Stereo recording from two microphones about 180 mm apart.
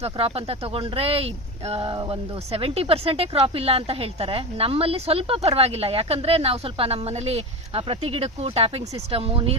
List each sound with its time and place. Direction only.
0.0 s speech: 30° right (ahead or behind)